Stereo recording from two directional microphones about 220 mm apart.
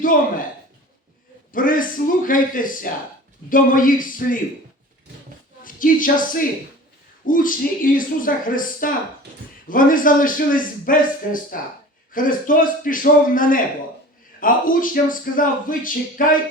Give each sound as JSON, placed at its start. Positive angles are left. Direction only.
{"t": 0.0, "sound": "speech", "side_deg": 40}
{"t": 1.5, "sound": "speech", "side_deg": 40}
{"t": 5.6, "sound": "speech", "side_deg": 40}